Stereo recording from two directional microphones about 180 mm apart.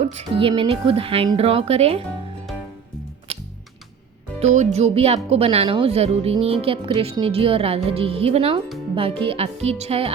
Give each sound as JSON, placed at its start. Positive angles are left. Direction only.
{"t": 0.2, "sound": "speech", "side_deg": -30}
{"t": 4.4, "sound": "speech", "side_deg": -40}